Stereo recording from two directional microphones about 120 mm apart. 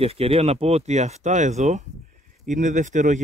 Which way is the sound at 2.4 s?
90° right.